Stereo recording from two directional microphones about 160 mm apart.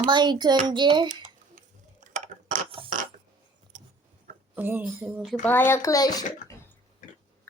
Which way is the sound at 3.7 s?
55° right (ahead or behind).